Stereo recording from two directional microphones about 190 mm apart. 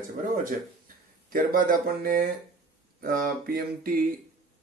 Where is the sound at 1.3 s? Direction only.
50° right (ahead or behind).